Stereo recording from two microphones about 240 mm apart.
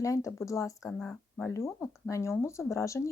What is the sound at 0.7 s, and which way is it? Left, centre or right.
Speech, centre.